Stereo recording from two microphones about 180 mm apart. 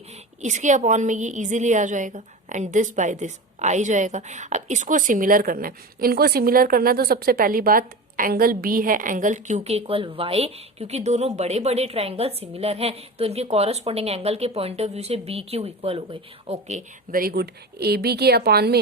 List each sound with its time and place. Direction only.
0.4 s a woman's voice: 40° right (ahead or behind); by 18.8 s 65° right (ahead or behind)